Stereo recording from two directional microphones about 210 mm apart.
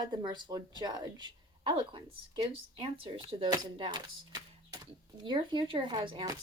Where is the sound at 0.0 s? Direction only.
20° right (ahead or behind).